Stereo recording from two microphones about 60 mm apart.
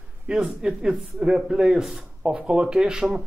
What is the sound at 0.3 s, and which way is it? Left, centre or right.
Speech, centre.